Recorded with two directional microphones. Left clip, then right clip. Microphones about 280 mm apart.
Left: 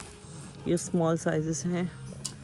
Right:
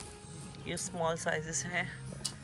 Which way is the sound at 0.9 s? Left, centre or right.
Left.